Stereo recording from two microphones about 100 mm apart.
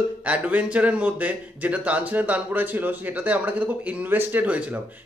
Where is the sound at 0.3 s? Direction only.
15° right (ahead or behind).